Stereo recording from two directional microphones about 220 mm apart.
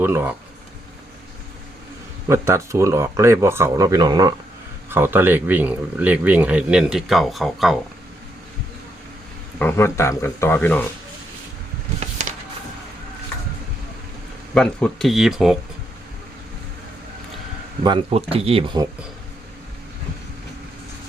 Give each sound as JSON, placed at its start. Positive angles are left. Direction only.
{"t": 0.0, "sound": "speech", "side_deg": -10}
{"t": 2.2, "sound": "speech", "side_deg": -10}
{"t": 9.6, "sound": "speech", "side_deg": 10}
{"t": 14.5, "sound": "speech", "side_deg": 5}
{"t": 17.8, "sound": "speech", "side_deg": -25}